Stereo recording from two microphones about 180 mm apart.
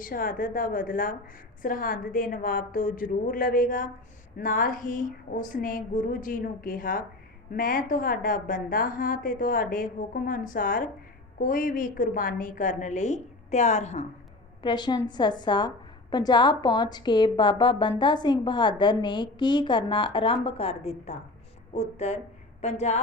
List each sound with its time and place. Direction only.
0.0 s a woman's voice: 50° left (ahead or behind)
14.6 s a woman's voice: 25° left (ahead or behind)